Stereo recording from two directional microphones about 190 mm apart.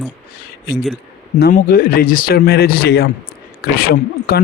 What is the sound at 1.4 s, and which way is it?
Speech, 50° left (ahead or behind).